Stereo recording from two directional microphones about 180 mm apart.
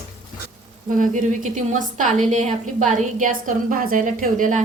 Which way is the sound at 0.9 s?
45° right (ahead or behind).